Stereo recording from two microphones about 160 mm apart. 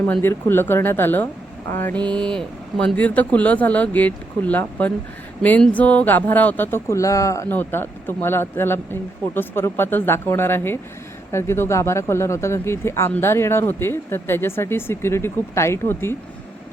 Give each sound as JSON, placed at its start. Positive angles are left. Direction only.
{"t": 0.1, "sound": "speech", "side_deg": 15}